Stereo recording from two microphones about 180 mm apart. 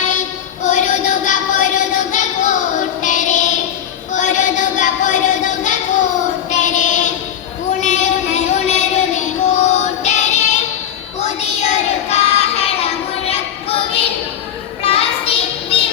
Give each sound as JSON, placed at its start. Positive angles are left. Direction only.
{"t": 0.6, "sound": "child singing", "side_deg": 40}
{"t": 4.1, "sound": "a sound", "side_deg": 45}
{"t": 6.5, "sound": "child singing", "side_deg": 45}
{"t": 7.7, "sound": "music", "side_deg": 40}
{"t": 11.2, "sound": "child singing", "side_deg": 40}
{"t": 14.8, "sound": "a sound", "side_deg": 35}